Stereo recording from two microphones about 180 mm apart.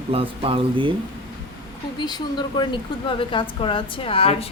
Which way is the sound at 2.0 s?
25° left (ahead or behind).